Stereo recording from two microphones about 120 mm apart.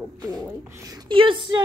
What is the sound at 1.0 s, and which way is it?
Speech, 45° right (ahead or behind).